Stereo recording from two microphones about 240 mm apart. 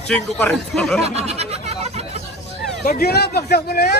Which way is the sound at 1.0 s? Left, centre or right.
Right.